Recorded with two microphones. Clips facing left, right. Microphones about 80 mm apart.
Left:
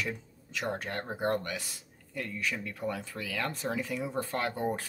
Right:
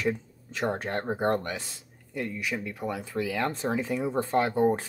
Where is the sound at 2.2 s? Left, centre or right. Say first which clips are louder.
Right 3 dB; centre.